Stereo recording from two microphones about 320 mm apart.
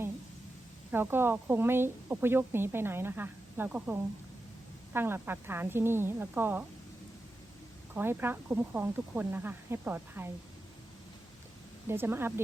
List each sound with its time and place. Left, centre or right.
0.9 s a woman's voice: centre
4.9 s a woman's voice: centre
7.9 s a woman's voice: centre
11.9 s a woman's voice: centre